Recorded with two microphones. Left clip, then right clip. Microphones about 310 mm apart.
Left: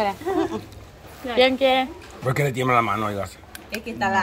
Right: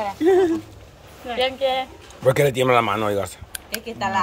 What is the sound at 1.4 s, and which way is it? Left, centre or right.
Speech, left.